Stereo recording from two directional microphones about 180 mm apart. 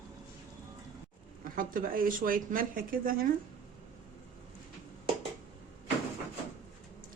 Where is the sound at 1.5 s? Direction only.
50° right (ahead or behind).